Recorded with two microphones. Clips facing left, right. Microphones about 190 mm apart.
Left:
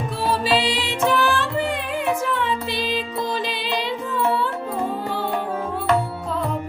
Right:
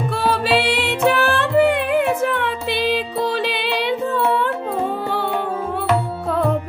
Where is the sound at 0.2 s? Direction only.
70° right (ahead or behind).